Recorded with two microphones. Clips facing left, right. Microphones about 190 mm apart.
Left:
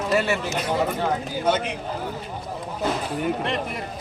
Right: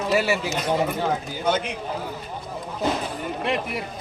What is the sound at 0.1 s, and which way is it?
Speech, 5° right (ahead or behind).